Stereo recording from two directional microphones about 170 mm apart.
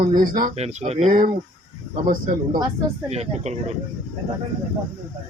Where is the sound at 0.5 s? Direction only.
40° right (ahead or behind).